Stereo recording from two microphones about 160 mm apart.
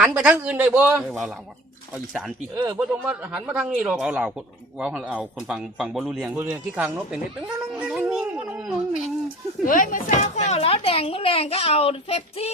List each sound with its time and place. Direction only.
0.0 s a man's voice: 10° right (ahead or behind)
2.7 s a man's voice: 5° right (ahead or behind)
9.6 s speech: 60° left (ahead or behind); by 12.5 s 40° left (ahead or behind)